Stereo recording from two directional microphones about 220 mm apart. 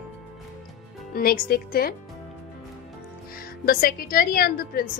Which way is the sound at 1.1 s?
45° left (ahead or behind).